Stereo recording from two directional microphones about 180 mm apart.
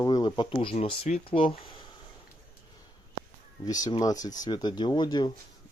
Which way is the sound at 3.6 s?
20° left (ahead or behind).